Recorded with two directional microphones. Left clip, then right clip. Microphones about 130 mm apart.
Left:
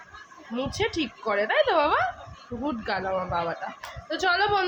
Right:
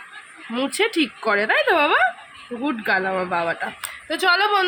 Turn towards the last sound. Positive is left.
turn(degrees=-30)  # may be behind; listen again after turning